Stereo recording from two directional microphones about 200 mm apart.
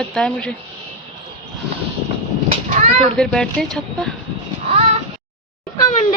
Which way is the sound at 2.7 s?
35° right (ahead or behind).